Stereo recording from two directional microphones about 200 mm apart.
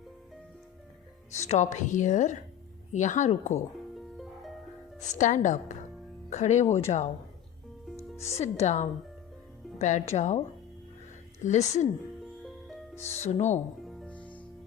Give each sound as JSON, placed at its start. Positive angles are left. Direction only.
{"t": 1.3, "sound": "speech", "side_deg": 35}
{"t": 3.9, "sound": "music", "side_deg": 0}
{"t": 4.9, "sound": "speech", "side_deg": 35}
{"t": 8.2, "sound": "speech", "side_deg": 30}
{"t": 11.4, "sound": "speech", "side_deg": 35}
{"t": 12.2, "sound": "music", "side_deg": 0}
{"t": 13.0, "sound": "speech", "side_deg": 35}
{"t": 13.8, "sound": "music", "side_deg": 0}